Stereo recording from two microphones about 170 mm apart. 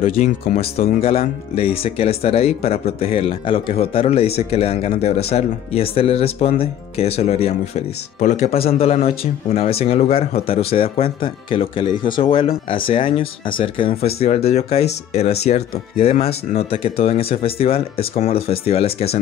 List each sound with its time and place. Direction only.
0.0 s speech: 35° left (ahead or behind)